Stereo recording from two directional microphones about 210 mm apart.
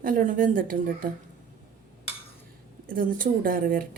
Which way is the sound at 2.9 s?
40° right (ahead or behind).